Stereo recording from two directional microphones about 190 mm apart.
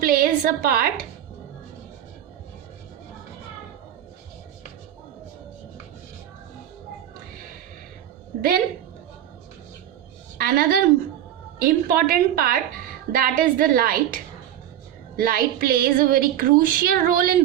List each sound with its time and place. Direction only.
0.0 s a sound: 50° right (ahead or behind)
8.4 s a woman's voice: 50° right (ahead or behind)
10.3 s a woman's voice: 50° right (ahead or behind)